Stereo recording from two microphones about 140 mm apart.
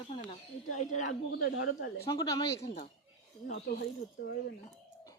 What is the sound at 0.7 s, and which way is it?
Speech, 60° left (ahead or behind).